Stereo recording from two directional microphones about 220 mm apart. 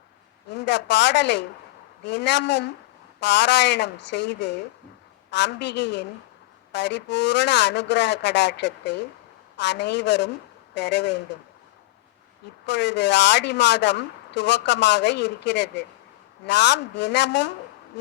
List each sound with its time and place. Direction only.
0.5 s speech: 50° left (ahead or behind)
12.6 s speech: 50° left (ahead or behind)